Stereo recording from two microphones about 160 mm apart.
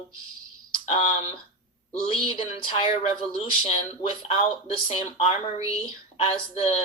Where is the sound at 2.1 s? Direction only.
35° left (ahead or behind).